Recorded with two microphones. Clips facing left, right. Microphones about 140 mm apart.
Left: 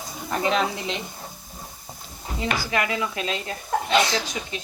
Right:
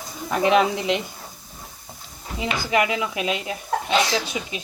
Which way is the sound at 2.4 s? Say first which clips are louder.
Right 3 dB; 20° right (ahead or behind).